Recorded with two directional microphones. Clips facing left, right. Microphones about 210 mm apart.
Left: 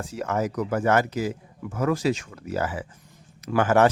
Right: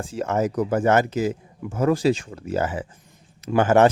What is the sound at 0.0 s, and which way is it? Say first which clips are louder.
Speech: right 3 dB; 30° right (ahead or behind).